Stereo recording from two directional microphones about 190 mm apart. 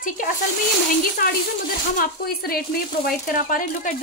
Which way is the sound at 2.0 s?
50° left (ahead or behind).